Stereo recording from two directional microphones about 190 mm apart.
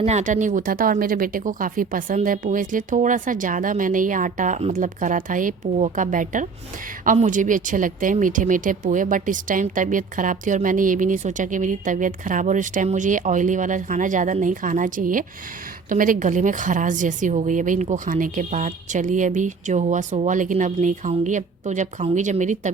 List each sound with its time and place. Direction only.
0.0 s a woman's voice: 35° right (ahead or behind)